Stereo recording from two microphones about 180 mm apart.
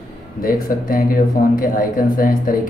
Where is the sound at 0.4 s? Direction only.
50° left (ahead or behind).